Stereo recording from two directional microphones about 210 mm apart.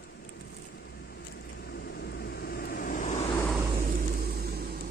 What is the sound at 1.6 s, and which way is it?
Vehicle, 50° left (ahead or behind).